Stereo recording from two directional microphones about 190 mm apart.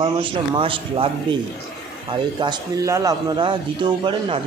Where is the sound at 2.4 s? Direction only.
20° right (ahead or behind).